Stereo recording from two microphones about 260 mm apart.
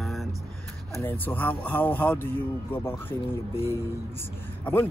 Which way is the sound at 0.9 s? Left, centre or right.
Centre.